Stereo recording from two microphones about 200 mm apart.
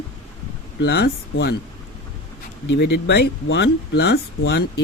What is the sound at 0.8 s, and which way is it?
Speech, 55° left (ahead or behind).